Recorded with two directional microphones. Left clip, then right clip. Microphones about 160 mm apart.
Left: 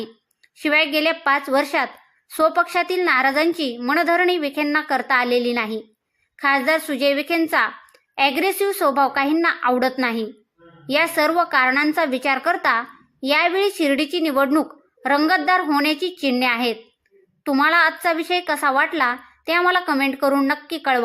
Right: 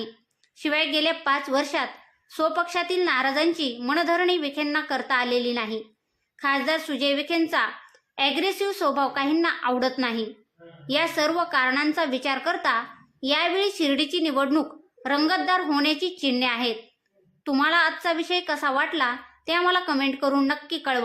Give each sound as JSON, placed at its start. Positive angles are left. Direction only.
{"t": 0.6, "sound": "a woman's voice", "side_deg": 25}